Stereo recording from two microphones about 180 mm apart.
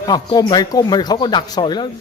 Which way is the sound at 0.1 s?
25° left (ahead or behind).